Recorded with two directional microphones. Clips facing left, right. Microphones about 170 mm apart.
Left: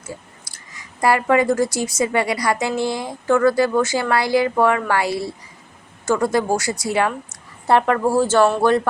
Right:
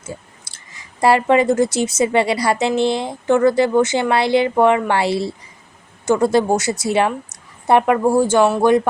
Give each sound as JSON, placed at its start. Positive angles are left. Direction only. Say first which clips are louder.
{"t": 0.5, "sound": "speech", "louder": "left 1 dB", "side_deg": -25}